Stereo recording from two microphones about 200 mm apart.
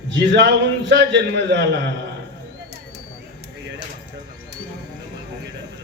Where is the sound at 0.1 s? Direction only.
60° right (ahead or behind).